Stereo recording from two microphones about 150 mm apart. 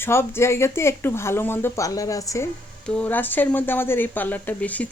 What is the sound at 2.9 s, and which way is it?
Speech, 10° left (ahead or behind).